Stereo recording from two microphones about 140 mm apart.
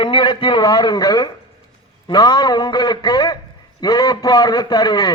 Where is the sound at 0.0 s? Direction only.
30° left (ahead or behind).